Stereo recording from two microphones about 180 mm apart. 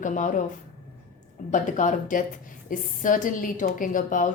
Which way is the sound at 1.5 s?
45° left (ahead or behind).